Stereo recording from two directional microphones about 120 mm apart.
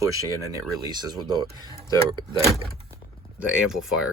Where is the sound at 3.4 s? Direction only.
5° right (ahead or behind).